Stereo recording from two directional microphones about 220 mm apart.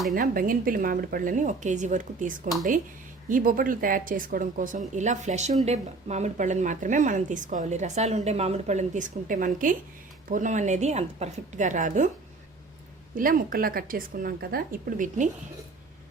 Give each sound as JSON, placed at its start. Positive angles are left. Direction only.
{"t": 0.1, "sound": "a woman's voice", "side_deg": -40}
{"t": 13.1, "sound": "a woman's voice", "side_deg": -40}